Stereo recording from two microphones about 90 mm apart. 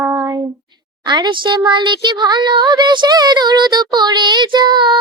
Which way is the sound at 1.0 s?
55° right (ahead or behind).